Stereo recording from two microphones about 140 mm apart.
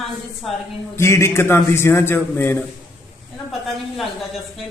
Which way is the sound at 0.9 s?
20° left (ahead or behind).